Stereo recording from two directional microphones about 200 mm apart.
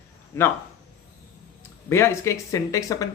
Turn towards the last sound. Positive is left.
turn(degrees=15)  # may be behind; listen again after turning